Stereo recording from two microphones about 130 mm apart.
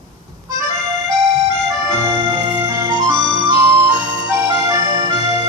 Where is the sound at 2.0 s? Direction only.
35° right (ahead or behind).